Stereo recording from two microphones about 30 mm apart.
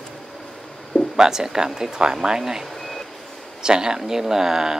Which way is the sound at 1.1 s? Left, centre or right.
Right.